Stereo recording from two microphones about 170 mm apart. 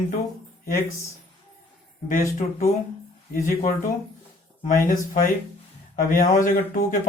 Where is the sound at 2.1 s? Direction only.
45° left (ahead or behind).